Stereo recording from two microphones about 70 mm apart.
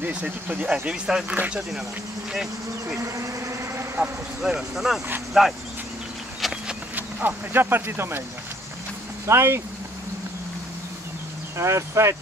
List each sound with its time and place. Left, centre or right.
0.0 s speech: centre
3.0 s bee: right
3.7 s vehicle: right
4.4 s speech: centre
6.4 s a sound: centre
7.0 s speech: right
9.2 s speech: right
11.5 s speech: right